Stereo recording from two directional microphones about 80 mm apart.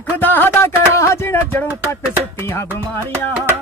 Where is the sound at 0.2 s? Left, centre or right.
Left.